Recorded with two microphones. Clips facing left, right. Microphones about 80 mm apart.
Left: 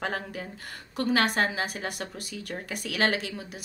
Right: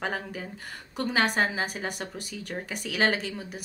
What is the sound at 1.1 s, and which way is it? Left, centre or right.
Speech, centre.